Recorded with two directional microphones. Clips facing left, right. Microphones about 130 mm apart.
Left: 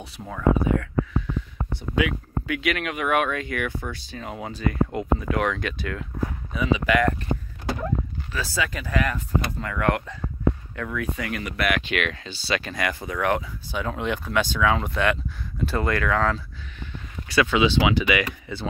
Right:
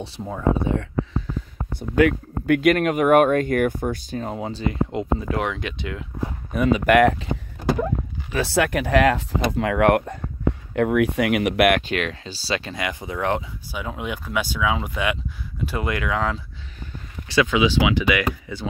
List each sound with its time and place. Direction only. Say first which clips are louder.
0.2 s speech: even; 25° right (ahead or behind)
1.7 s speech: right 7 dB; 50° right (ahead or behind)
4.3 s speech: even; 30° right (ahead or behind)
6.5 s speech: right 6 dB; 55° right (ahead or behind); by 7.2 s 80° right
8.3 s speech: right 8 dB; 65° right (ahead or behind)
10.7 s speech: right 10 dB; 70° right (ahead or behind)
11.8 s speech: right 1 dB; 35° right (ahead or behind)
13.7 s speech: left 3 dB; 5° right (ahead or behind)